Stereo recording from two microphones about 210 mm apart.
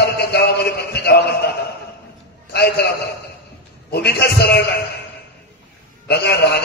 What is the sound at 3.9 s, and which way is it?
Speech, 50° left (ahead or behind).